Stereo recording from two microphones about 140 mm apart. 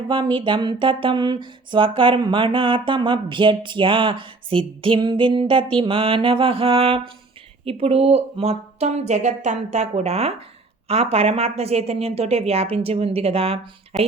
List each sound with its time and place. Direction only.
0.1 s speech: 35° right (ahead or behind)
13.9 s speech: centre (ahead or behind)